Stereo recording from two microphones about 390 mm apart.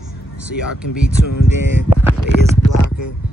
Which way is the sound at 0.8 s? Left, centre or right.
Left.